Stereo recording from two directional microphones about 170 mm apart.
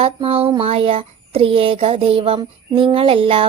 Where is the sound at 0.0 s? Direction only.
35° right (ahead or behind).